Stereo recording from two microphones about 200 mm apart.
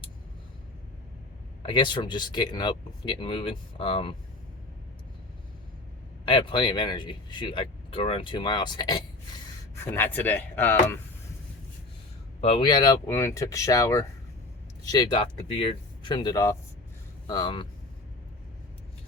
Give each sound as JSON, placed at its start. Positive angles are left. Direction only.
{"t": 1.6, "sound": "speech", "side_deg": 25}
{"t": 6.2, "sound": "speech", "side_deg": 25}
{"t": 9.7, "sound": "speech", "side_deg": 10}
{"t": 12.4, "sound": "speech", "side_deg": 25}